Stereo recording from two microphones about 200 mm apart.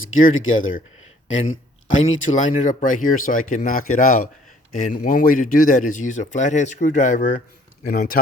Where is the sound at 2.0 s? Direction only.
80° left.